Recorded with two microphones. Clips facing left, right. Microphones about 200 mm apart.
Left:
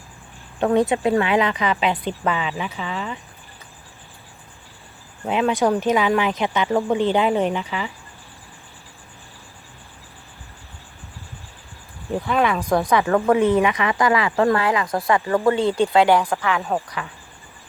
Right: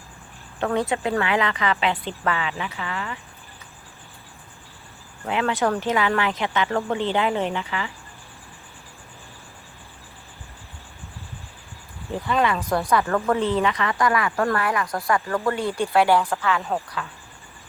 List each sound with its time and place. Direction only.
0.6 s speech: 20° left (ahead or behind)
5.2 s speech: 20° left (ahead or behind)
12.2 s speech: 10° left (ahead or behind)